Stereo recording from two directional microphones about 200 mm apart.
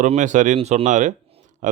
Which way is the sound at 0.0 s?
40° right (ahead or behind).